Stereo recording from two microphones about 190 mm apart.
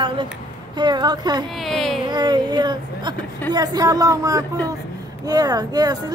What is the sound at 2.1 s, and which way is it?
Speech, 25° right (ahead or behind).